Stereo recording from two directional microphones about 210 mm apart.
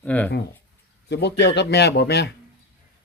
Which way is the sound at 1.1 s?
55° left (ahead or behind).